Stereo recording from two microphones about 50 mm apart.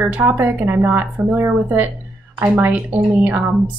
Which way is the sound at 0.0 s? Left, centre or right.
Right.